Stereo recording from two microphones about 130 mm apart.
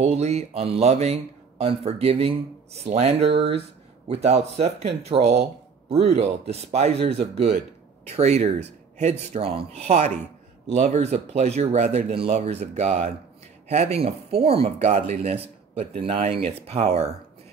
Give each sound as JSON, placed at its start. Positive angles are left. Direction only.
{"t": 0.0, "sound": "speech", "side_deg": -55}